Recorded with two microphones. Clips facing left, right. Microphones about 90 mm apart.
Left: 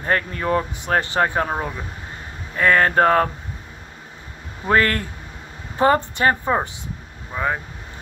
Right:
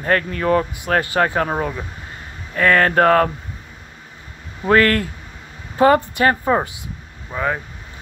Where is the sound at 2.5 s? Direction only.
25° left (ahead or behind).